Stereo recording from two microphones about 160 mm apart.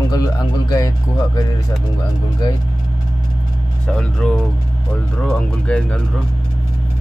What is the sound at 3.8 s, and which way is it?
Speech, 5° left (ahead or behind).